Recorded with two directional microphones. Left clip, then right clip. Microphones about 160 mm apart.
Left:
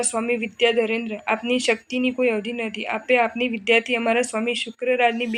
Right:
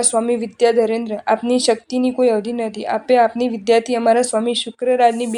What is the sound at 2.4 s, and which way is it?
Speech, 55° right (ahead or behind).